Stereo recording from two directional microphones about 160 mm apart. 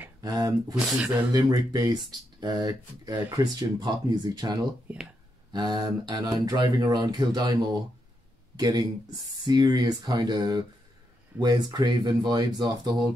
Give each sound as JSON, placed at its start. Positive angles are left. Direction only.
{"t": 0.2, "sound": "speech", "side_deg": -25}
{"t": 0.7, "sound": "speech", "side_deg": -5}
{"t": 1.3, "sound": "speech", "side_deg": -25}
{"t": 4.9, "sound": "speech", "side_deg": -10}
{"t": 5.5, "sound": "speech", "side_deg": -25}